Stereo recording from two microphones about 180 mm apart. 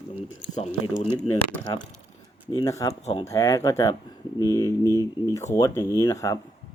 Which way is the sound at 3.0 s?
30° left (ahead or behind).